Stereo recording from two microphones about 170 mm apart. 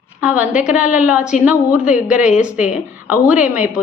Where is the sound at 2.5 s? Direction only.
45° left (ahead or behind).